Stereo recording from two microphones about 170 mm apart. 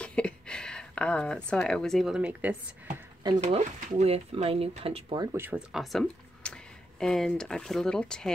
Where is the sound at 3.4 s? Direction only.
45° right (ahead or behind).